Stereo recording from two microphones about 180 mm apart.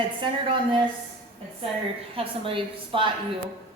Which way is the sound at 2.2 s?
30° right (ahead or behind).